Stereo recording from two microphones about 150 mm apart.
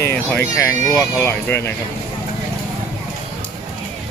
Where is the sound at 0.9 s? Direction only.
15° left (ahead or behind).